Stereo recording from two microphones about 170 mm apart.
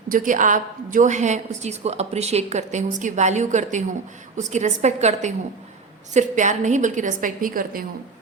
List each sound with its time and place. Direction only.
0.1 s a woman's voice: 50° right (ahead or behind)